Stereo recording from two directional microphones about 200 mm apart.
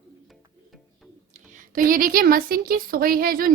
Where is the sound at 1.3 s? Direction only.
45° right (ahead or behind).